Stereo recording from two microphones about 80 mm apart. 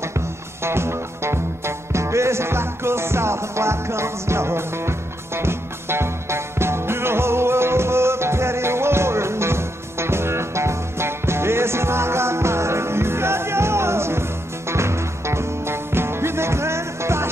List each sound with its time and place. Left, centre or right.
0.7 s music: right